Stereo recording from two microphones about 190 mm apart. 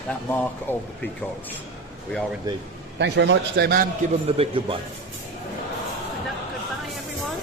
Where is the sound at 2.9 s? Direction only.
65° right (ahead or behind).